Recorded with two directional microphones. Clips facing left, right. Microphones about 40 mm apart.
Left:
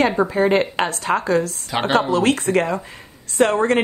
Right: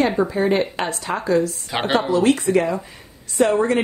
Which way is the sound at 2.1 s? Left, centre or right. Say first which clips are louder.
Right 1 dB; left.